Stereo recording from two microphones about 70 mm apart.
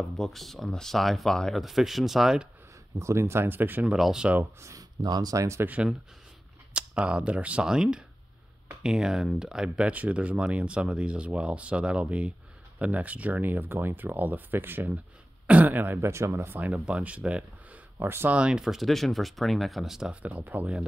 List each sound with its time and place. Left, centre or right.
0.2 s speech: centre
3.0 s speech: right
3.8 s speech: centre
4.6 s speech: right
5.0 s speech: right
5.4 s speech: right
6.7 s speech: centre; by 16.5 s right
16.5 s speech: right
17.9 s speech: right
18.3 s speech: centre
20.2 s speech: right